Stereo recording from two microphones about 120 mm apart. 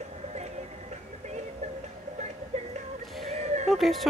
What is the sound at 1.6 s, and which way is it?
Music, 75° right (ahead or behind).